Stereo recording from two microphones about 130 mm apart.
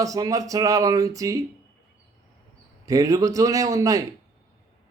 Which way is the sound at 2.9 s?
25° right (ahead or behind).